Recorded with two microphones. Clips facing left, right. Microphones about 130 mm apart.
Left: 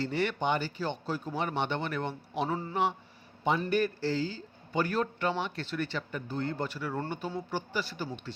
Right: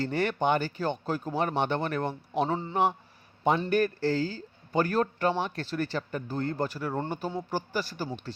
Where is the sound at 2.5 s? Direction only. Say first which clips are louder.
Right 3 dB; 25° right (ahead or behind).